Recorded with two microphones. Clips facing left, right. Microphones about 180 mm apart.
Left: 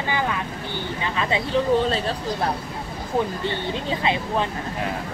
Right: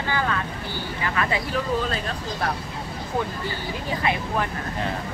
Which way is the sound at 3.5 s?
25° left (ahead or behind).